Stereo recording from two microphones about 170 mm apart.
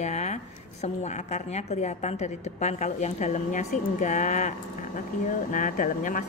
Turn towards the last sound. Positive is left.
turn(degrees=55)  # may be behind; listen again after turning